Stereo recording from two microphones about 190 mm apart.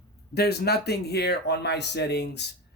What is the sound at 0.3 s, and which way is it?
Speech, 55° left (ahead or behind).